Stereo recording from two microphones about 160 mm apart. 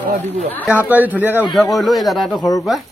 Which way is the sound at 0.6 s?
10° right (ahead or behind).